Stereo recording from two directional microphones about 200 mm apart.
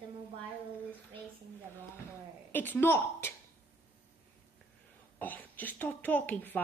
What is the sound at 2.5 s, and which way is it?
Speech, 10° left (ahead or behind).